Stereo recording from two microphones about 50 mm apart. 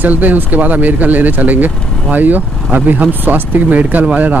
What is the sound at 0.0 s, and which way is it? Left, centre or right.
Speech, right.